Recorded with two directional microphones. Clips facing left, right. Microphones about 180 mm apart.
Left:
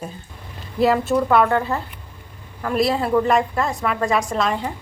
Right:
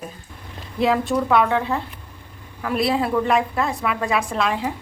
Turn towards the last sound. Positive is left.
turn(degrees=-5)  # may be behind; listen again after turning